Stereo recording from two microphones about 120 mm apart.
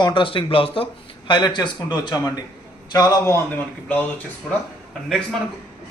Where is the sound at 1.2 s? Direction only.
40° left (ahead or behind).